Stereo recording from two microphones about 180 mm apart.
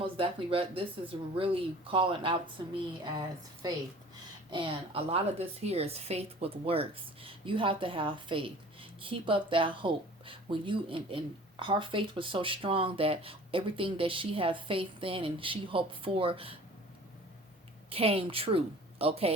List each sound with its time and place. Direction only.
0.0 s a woman's voice: 30° right (ahead or behind)
17.8 s a woman's voice: 30° right (ahead or behind)